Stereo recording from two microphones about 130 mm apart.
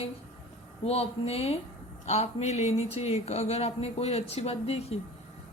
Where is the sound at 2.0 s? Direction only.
60° left (ahead or behind).